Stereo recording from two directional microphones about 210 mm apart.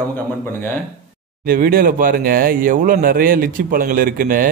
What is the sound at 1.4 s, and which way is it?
Speech, 45° right (ahead or behind).